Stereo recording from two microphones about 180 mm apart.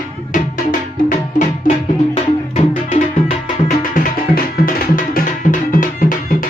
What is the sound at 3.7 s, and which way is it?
Music, 50° left (ahead or behind).